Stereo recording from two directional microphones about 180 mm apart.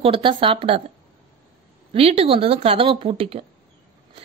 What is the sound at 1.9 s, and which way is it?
A woman's voice, 35° right (ahead or behind).